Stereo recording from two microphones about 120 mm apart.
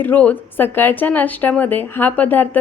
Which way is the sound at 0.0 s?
15° left (ahead or behind).